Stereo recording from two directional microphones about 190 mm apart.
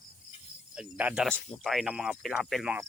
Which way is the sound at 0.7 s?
5° right (ahead or behind).